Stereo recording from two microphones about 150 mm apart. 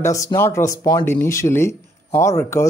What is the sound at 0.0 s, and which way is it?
Speech, 20° left (ahead or behind).